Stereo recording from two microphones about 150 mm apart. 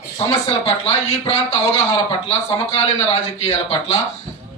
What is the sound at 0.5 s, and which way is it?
A man's voice, 40° left (ahead or behind).